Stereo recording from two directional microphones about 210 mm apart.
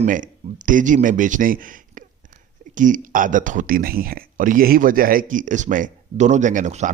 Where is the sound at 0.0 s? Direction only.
40° right (ahead or behind).